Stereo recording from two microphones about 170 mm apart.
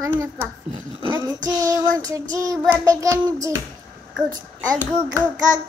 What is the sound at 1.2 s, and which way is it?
A child's voice, 20° right (ahead or behind).